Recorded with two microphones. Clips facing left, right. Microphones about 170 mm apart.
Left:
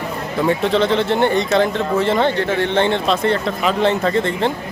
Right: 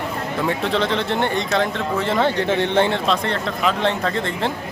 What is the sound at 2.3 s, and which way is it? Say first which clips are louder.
Speech: left 1 dB; 15° right (ahead or behind).